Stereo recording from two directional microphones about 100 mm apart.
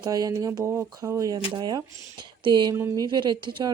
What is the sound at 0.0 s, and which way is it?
Speech, 35° right (ahead or behind).